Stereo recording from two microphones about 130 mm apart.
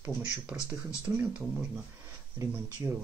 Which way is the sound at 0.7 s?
10° right (ahead or behind).